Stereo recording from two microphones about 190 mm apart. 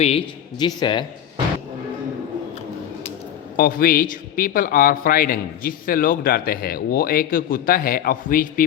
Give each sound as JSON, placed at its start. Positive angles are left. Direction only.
{"t": 0.6, "sound": "speech", "side_deg": 25}
{"t": 3.6, "sound": "speech", "side_deg": 50}